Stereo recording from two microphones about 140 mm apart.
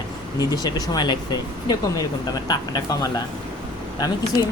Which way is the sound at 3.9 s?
30° left (ahead or behind).